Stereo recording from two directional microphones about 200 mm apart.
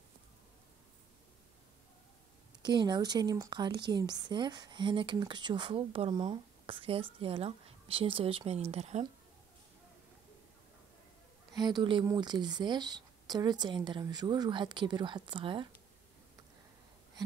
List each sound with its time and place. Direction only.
2.6 s speech: 20° right (ahead or behind)
11.5 s speech: 20° right (ahead or behind)